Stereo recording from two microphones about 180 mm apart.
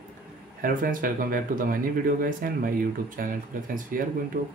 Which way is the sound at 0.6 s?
50° right (ahead or behind).